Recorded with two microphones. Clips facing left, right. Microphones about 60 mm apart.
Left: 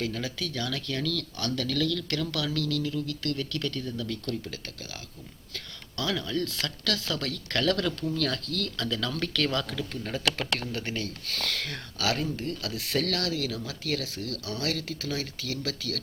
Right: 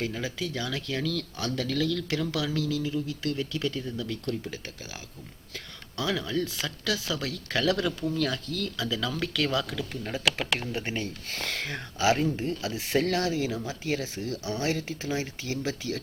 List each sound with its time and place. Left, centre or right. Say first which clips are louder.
0.0 s speech: right 1 dB; centre